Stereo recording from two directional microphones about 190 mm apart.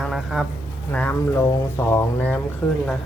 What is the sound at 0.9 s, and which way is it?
Speech, 10° left (ahead or behind).